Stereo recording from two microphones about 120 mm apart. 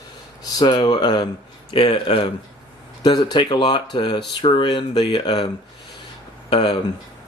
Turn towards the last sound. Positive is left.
turn(degrees=50)  # may be behind; listen again after turning